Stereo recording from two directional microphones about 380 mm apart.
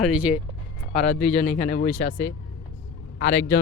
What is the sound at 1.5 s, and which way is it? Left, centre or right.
Speech, centre.